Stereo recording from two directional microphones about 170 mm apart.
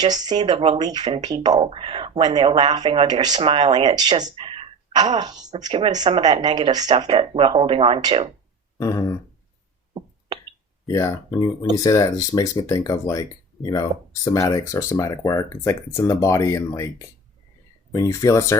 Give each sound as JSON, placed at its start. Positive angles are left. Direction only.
{"t": 0.0, "sound": "speech", "side_deg": -25}
{"t": 8.8, "sound": "speech", "side_deg": 20}
{"t": 10.8, "sound": "speech", "side_deg": 15}